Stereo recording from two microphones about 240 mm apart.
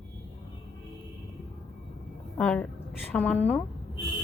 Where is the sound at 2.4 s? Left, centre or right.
Centre.